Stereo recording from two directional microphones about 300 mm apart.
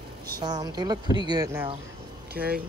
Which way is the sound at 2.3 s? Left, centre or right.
Right.